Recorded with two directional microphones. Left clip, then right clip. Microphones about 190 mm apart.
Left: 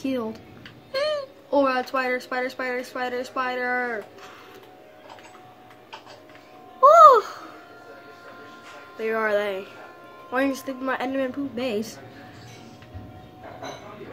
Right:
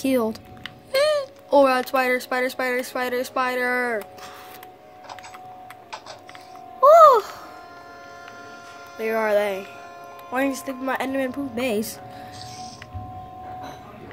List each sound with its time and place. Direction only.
0.0 s speech: 50° right (ahead or behind)
6.8 s a sound: 35° right (ahead or behind)
8.9 s speech: 35° right (ahead or behind)